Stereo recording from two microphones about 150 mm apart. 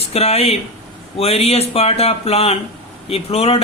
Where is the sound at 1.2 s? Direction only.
40° left (ahead or behind).